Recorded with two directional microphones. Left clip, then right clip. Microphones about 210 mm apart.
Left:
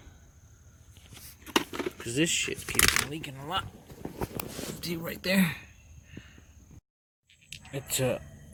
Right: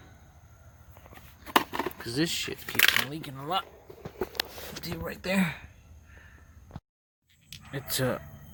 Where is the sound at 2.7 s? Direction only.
30° left (ahead or behind).